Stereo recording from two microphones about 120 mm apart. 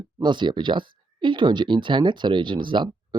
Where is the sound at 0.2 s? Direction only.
40° right (ahead or behind).